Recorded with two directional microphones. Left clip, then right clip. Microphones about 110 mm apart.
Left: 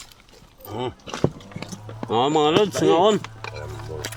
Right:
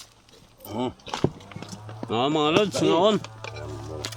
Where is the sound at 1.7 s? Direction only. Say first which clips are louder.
Left 5 dB; 20° right (ahead or behind).